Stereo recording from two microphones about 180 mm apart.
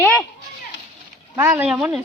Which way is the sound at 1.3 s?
15° right (ahead or behind).